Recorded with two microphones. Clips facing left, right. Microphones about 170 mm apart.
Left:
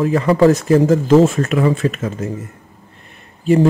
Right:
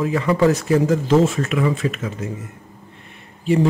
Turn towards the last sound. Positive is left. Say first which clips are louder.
# left 4 dB
turn(degrees=45)  # may be behind; listen again after turning